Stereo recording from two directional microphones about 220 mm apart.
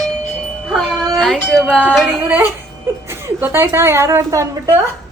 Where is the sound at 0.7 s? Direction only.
Centre (ahead or behind).